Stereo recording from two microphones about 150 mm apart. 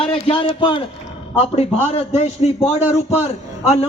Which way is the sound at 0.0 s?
35° left (ahead or behind).